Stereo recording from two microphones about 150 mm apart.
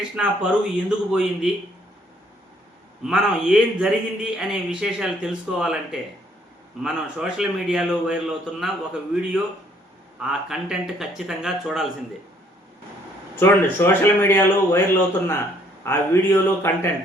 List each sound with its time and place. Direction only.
0.2 s speech: 5° right (ahead or behind)
3.0 s speech: 5° right (ahead or behind)
13.3 s speech: 15° left (ahead or behind)